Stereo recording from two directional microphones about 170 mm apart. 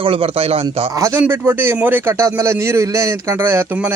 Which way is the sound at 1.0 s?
15° right (ahead or behind).